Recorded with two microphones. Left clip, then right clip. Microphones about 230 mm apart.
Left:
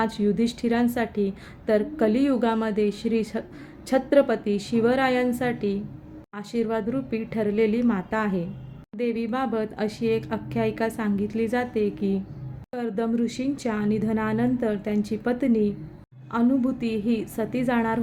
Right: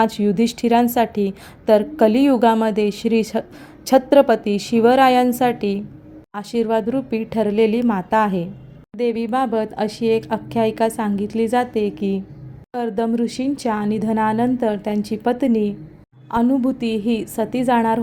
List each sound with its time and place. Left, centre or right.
0.0 s a woman's voice: right